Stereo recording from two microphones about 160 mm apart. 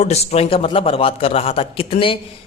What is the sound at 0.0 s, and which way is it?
Speech, 45° left (ahead or behind).